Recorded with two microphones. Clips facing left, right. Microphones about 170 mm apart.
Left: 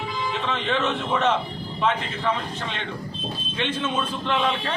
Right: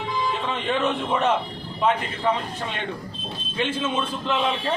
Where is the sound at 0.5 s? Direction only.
10° right (ahead or behind).